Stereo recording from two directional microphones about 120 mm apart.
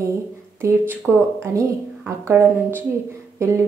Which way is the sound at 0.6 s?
20° right (ahead or behind).